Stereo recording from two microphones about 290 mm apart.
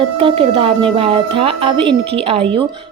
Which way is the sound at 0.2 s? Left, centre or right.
Centre.